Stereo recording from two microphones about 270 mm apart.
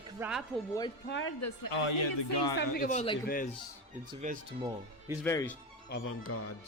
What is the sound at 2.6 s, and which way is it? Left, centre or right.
Speech, left.